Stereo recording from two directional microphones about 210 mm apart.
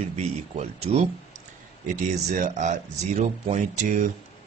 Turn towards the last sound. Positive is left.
turn(degrees=-35)  # may be behind; listen again after turning